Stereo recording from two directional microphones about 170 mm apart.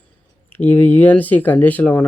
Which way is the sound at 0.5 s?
10° left (ahead or behind).